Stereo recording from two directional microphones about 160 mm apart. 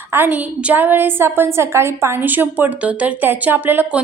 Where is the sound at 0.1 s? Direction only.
10° right (ahead or behind).